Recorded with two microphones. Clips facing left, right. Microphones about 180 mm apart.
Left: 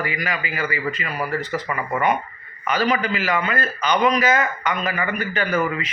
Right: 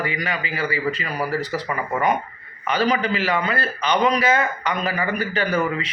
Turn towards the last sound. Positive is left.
turn(degrees=-35)  # may be behind; listen again after turning